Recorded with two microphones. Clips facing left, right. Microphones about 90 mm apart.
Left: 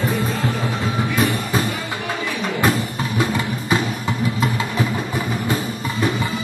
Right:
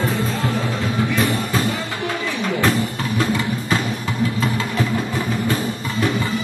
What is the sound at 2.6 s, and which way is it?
Music, 20° left (ahead or behind).